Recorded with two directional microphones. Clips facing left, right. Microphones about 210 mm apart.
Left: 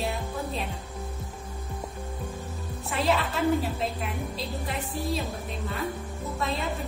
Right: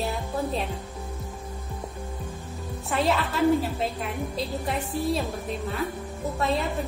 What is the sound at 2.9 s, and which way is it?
A woman's voice, centre (ahead or behind).